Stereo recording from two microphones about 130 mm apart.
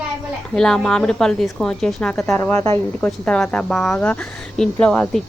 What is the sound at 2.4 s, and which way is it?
Speech, 20° left (ahead or behind).